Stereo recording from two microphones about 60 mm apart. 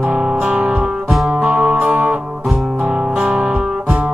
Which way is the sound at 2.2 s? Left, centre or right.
Centre.